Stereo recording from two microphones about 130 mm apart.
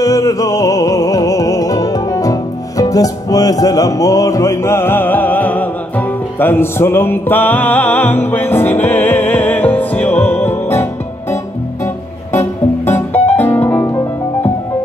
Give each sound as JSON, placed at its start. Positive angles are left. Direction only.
{"t": 0.0, "sound": "music", "side_deg": 25}